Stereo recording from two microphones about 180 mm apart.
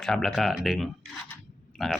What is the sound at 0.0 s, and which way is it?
Speech, centre (ahead or behind).